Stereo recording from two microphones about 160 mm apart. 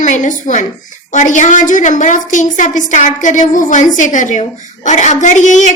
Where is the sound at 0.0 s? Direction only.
50° left (ahead or behind).